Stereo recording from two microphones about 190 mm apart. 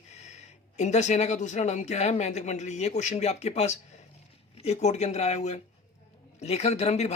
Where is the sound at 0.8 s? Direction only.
35° left (ahead or behind).